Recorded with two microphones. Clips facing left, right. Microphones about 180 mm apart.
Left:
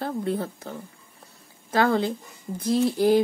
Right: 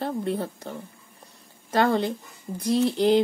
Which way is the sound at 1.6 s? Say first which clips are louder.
Even; 5° left (ahead or behind).